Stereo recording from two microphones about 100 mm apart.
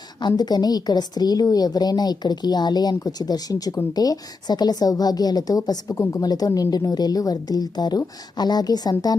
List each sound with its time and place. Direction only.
0.2 s a woman's voice: 45° left (ahead or behind)